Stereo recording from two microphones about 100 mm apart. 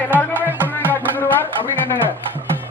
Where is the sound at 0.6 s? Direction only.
20° left (ahead or behind).